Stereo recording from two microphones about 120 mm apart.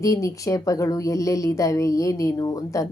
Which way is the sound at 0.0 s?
25° left (ahead or behind).